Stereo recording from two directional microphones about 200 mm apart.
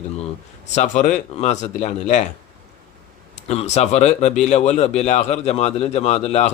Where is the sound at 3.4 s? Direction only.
35° left (ahead or behind).